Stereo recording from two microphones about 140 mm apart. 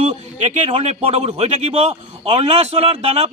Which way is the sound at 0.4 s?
50° right (ahead or behind).